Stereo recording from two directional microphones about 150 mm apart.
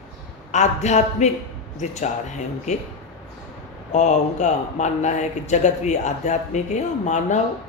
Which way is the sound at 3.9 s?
50° left (ahead or behind).